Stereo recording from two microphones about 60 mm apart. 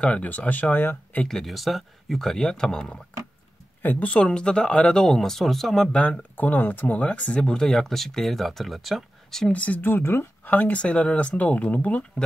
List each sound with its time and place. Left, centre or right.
0.0 s speech: left
1.4 s speech: centre
3.8 s speech: left; by 5.9 s centre
5.9 s speech: centre
6.3 s speech: left; by 9.5 s centre
9.5 s speech: left
9.8 s speech: left